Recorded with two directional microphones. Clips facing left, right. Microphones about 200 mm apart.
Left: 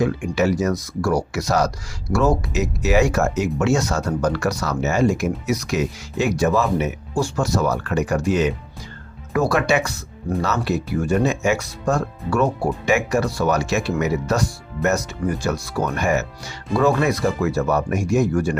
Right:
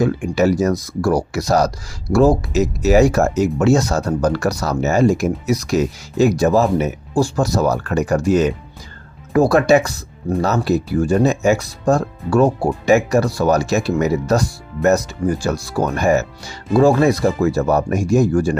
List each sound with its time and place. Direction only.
0.0 s speech: 35° right (ahead or behind)